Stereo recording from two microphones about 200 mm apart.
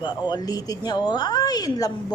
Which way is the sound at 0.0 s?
20° left (ahead or behind).